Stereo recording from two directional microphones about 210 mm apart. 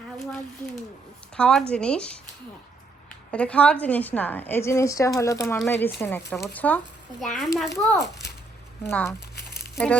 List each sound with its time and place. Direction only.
1.4 s speech: 5° left (ahead or behind)
3.1 s a woman's voice: 5° left (ahead or behind)
8.8 s a woman's voice: 10° left (ahead or behind)